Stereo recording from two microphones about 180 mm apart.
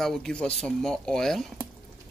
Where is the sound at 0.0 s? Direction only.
Centre (ahead or behind).